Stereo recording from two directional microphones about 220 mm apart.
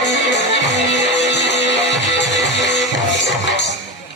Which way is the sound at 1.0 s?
50° left (ahead or behind).